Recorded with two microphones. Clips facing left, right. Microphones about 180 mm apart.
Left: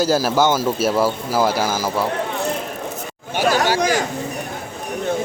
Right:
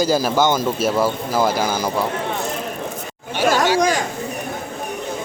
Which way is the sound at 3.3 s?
45° left (ahead or behind).